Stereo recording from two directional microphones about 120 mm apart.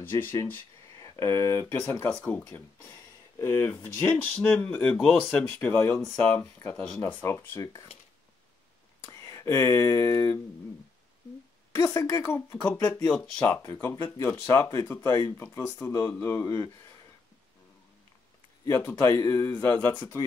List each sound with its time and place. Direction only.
0.0 s speech: 15° left (ahead or behind)
2.1 s speech: 10° left (ahead or behind)
2.4 s speech: 20° left (ahead or behind)
9.2 s speech: 25° left (ahead or behind)
11.7 s speech: 20° left (ahead or behind)
13.1 s speech: 5° left (ahead or behind)
13.6 s speech: 20° left (ahead or behind)
18.9 s speech: 25° left (ahead or behind)